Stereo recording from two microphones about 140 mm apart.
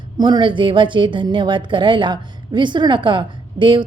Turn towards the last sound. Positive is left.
turn(degrees=-35)  # may be behind; listen again after turning